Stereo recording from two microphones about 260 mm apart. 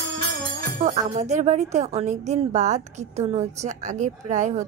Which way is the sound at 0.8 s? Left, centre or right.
Right.